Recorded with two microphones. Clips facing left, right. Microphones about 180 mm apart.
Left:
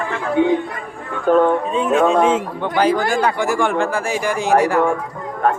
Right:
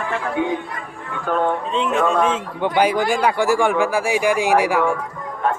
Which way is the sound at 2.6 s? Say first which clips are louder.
Right 2 dB; 15° right (ahead or behind).